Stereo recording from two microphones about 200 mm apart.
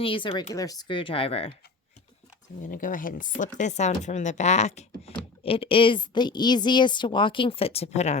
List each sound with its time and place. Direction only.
0.0 s a woman's voice: 25° left (ahead or behind)
2.6 s a woman's voice: 45° left (ahead or behind)